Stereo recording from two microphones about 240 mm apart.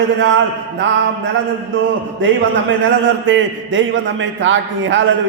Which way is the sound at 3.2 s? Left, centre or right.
Right.